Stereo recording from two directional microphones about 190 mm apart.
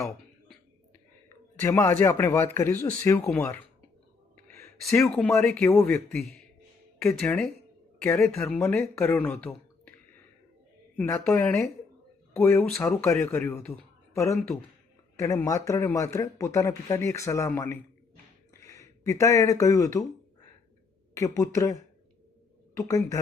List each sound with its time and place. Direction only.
1.5 s speech: 10° left (ahead or behind)
4.4 s a sound: 10° left (ahead or behind)
4.8 s speech: centre (ahead or behind)
10.9 s speech: 10° left (ahead or behind)
21.3 s speech: 15° left (ahead or behind)
22.9 s speech: 15° left (ahead or behind)